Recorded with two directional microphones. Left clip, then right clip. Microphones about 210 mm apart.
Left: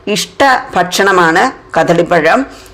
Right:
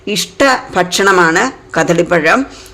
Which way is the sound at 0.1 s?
20° right (ahead or behind).